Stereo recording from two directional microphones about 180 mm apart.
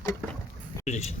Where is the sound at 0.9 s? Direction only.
40° left (ahead or behind).